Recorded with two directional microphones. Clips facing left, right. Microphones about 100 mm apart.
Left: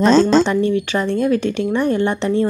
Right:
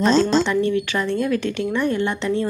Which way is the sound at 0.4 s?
25° left (ahead or behind).